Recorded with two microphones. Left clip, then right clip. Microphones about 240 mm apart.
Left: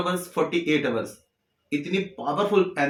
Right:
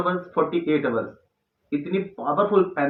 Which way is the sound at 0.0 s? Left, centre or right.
Left.